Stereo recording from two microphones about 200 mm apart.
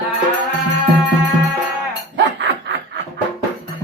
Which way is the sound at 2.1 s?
65° right (ahead or behind).